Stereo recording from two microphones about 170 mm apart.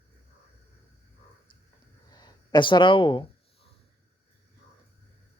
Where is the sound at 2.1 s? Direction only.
25° left (ahead or behind).